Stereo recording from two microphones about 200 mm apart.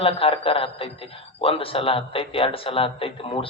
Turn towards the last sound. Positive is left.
turn(degrees=25)  # may be behind; listen again after turning